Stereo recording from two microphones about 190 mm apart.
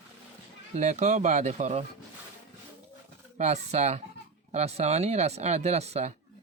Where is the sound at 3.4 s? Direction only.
35° right (ahead or behind).